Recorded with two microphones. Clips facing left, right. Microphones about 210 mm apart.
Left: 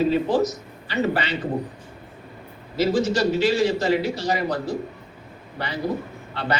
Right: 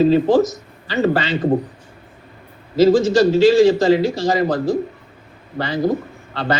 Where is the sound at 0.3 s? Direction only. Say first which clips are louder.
Right 6 dB; 90° right.